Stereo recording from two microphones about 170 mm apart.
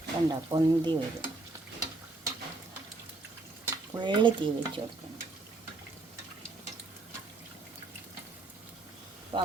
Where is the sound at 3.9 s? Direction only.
25° right (ahead or behind).